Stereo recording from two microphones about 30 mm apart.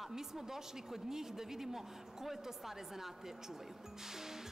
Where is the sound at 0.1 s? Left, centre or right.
Centre.